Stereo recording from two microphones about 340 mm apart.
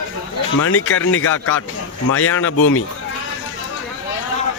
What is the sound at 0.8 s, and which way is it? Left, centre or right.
Speech, left.